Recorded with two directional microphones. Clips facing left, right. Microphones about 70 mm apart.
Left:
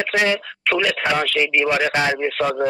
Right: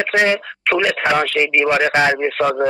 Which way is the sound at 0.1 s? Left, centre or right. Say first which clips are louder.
Right 4 dB; right.